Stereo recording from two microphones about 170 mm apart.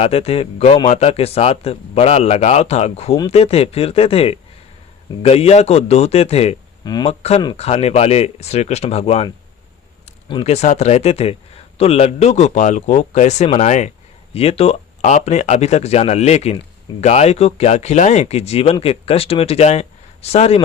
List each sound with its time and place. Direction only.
0.0 s speech: 35° left (ahead or behind)
6.8 s speech: 25° left (ahead or behind)
7.1 s speech: 40° left (ahead or behind)
10.1 s a sound: 35° left (ahead or behind)
10.5 s speech: 40° left (ahead or behind)